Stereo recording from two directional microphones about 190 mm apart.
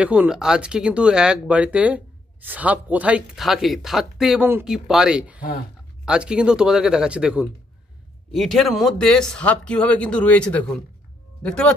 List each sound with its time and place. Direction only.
0.0 s speech: 5° right (ahead or behind)